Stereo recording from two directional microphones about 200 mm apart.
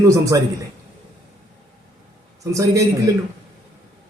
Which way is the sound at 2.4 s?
15° right (ahead or behind).